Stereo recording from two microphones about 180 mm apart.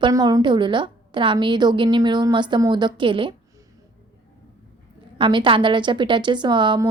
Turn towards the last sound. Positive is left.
turn(degrees=-25)  # may be behind; listen again after turning